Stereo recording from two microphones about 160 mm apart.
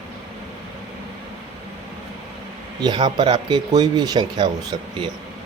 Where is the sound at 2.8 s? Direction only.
25° right (ahead or behind).